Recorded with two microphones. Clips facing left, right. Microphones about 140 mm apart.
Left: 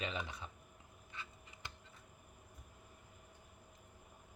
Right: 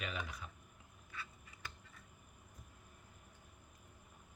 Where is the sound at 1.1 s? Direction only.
25° left (ahead or behind).